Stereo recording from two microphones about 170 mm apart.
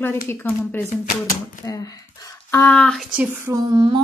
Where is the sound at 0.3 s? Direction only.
10° left (ahead or behind).